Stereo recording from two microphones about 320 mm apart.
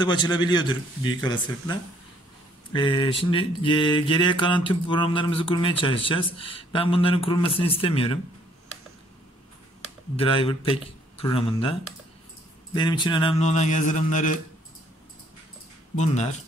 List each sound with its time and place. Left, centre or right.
0.0 s mantra: centre
10.1 s mantra: centre
12.7 s speech: centre
16.0 s speech: left